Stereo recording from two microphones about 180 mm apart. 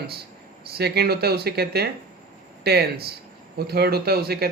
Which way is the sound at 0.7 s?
65° right (ahead or behind).